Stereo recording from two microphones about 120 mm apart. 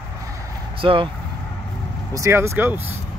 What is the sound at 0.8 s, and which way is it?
Speech, 45° right (ahead or behind).